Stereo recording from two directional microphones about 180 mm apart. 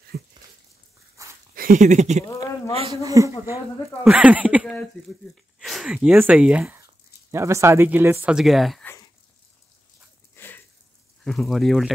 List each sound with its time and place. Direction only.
0.1 s a sound: 60° right (ahead or behind)
1.2 s dog: 15° right (ahead or behind)
1.5 s speech: 50° right (ahead or behind)
2.9 s speech: 20° right (ahead or behind); by 8.8 s centre (ahead or behind)
10.3 s a sound: 10° left (ahead or behind)
11.2 s speech: centre (ahead or behind)